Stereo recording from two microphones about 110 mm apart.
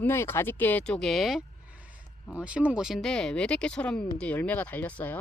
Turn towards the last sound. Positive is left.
turn(degrees=15)  # may be behind; listen again after turning